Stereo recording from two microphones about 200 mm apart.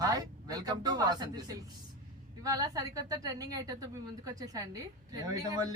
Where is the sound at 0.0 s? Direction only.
20° right (ahead or behind).